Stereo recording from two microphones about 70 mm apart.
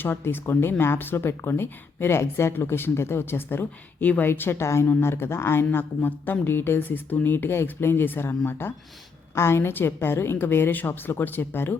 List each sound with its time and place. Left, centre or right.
0.0 s speech: left